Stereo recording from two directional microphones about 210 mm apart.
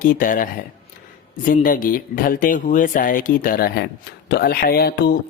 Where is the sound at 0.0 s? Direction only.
40° left (ahead or behind).